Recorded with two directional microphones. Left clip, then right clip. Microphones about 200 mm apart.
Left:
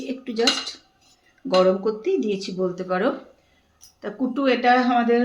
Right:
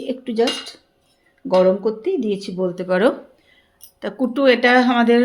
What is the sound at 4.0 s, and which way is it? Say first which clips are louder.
Speech: right 7 dB; 50° right (ahead or behind).